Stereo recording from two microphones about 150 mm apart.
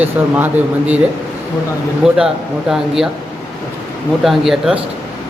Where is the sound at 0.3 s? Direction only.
10° right (ahead or behind).